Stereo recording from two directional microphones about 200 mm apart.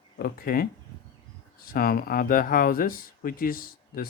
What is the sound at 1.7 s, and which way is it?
Speech, 50° left (ahead or behind).